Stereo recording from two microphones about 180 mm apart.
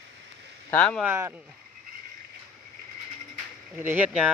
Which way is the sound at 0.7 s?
5° left (ahead or behind).